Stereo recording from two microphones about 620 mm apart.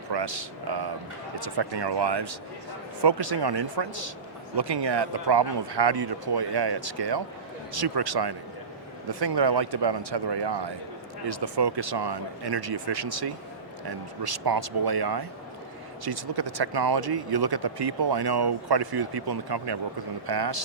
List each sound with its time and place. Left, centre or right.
0.1 s speech: right